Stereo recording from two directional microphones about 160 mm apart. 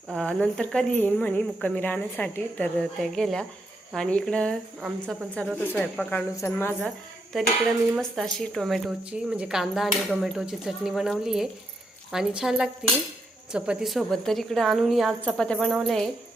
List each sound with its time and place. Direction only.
0.1 s a woman's voice: 5° left (ahead or behind)
4.8 s a woman's voice: 5° right (ahead or behind)
5.7 s speech: 10° left (ahead or behind)
7.9 s a woman's voice: centre (ahead or behind)